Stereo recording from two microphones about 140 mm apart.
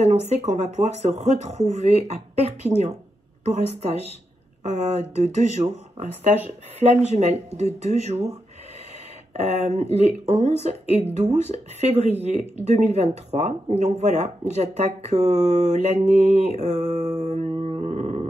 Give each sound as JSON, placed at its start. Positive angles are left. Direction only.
{"t": 0.0, "sound": "speech", "side_deg": -50}
{"t": 7.1, "sound": "speech", "side_deg": -50}